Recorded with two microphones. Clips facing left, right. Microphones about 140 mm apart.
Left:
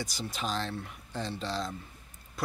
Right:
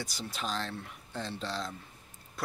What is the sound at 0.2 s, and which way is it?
Speech, centre (ahead or behind).